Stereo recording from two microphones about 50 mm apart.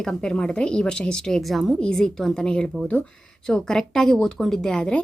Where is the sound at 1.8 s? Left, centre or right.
Centre.